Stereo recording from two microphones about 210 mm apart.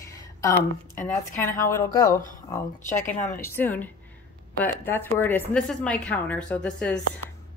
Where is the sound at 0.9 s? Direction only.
10° left (ahead or behind).